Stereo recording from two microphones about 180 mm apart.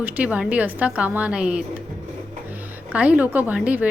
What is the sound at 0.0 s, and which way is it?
A woman's voice, 10° right (ahead or behind).